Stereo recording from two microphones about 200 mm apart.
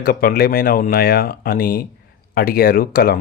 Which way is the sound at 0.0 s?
50° left (ahead or behind).